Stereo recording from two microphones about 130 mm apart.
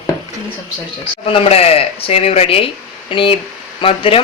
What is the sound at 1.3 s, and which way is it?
Speech, 50° left (ahead or behind).